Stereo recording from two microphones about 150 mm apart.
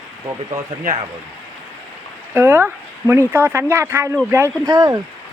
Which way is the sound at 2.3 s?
15° right (ahead or behind).